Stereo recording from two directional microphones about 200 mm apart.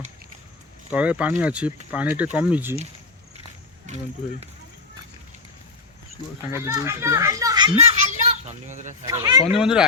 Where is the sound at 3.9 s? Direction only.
35° right (ahead or behind).